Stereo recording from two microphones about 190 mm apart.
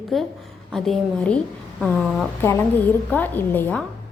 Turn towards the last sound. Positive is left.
turn(degrees=10)  # may be behind; listen again after turning